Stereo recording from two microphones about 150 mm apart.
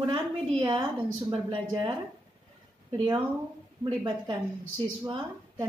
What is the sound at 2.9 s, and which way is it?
A woman's voice, 35° right (ahead or behind).